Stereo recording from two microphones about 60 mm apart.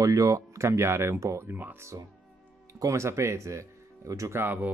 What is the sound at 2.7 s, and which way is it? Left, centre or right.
Speech, right.